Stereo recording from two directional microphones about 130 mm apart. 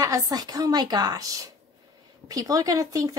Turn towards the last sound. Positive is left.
turn(degrees=-25)  # may be behind; listen again after turning